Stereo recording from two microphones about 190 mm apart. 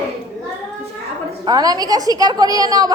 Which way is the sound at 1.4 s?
20° right (ahead or behind).